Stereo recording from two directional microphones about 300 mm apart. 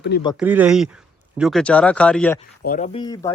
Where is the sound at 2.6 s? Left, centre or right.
Left.